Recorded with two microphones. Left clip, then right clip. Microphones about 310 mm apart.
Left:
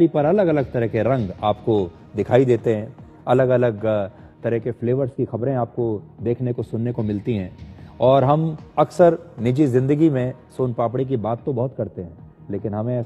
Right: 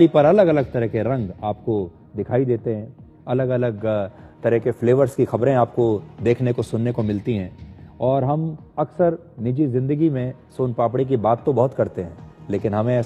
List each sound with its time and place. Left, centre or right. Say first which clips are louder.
0.0 s a man's voice: right 3 dB; centre; by 1.9 s left
2.1 s a man's voice: left 4 dB; left
3.3 s a man's voice: left 5 dB; centre
4.4 s a man's voice: right 4 dB; centre; by 5.3 s right
5.3 s speech: right 6 dB; right
6.2 s a man's voice: right 4 dB; right; by 7.5 s centre
8.0 s speech: left 5 dB; left
8.7 s a man's voice: left 5 dB; left; by 10.3 s centre
10.5 s a man's voice: right 2 dB; centre; by 11.9 s right
11.9 s speech: right 5 dB; right